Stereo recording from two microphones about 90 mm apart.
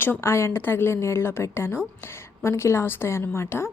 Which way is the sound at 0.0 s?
25° left (ahead or behind).